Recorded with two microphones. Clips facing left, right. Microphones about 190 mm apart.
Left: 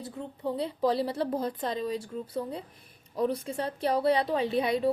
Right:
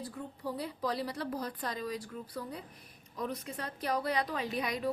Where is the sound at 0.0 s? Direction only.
25° left (ahead or behind).